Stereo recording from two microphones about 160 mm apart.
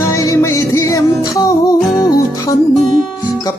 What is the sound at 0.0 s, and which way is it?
Music, 20° left (ahead or behind).